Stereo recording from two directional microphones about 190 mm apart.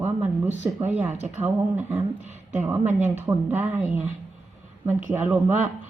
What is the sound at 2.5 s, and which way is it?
Speech, 10° right (ahead or behind).